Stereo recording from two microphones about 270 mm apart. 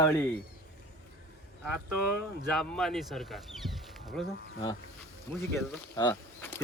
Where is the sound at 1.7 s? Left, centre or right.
Right.